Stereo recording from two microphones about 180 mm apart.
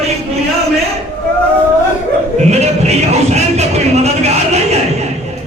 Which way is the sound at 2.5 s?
35° right (ahead or behind).